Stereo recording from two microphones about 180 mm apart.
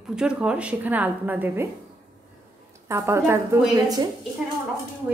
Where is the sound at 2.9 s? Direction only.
15° right (ahead or behind).